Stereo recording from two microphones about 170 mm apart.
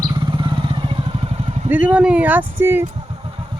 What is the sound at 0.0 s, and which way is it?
Vehicle, 30° right (ahead or behind).